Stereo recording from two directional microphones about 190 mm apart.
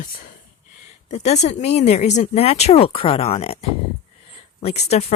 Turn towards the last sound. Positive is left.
turn(degrees=35)  # may be behind; listen again after turning